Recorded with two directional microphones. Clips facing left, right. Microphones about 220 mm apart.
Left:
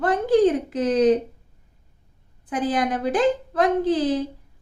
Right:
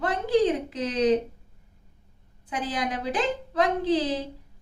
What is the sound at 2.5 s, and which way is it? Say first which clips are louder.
A woman's voice: left 7 dB; 50° left (ahead or behind).